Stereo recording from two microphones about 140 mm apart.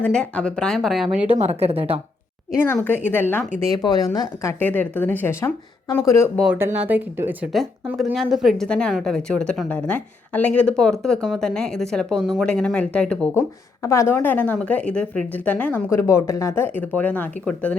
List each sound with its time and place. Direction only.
0.0 s a woman's voice: 5° left (ahead or behind)
1.3 s a woman's voice: 45° right (ahead or behind)
3.1 s speech: 15° left (ahead or behind)
3.6 s a woman's voice: 25° left (ahead or behind)
4.6 s speech: 15° left (ahead or behind)
6.7 s speech: 10° right (ahead or behind)
7.9 s a woman's voice: centre (ahead or behind)
13.8 s speech: 20° left (ahead or behind)